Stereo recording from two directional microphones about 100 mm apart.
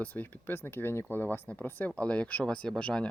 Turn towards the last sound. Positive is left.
turn(degrees=10)  # may be behind; listen again after turning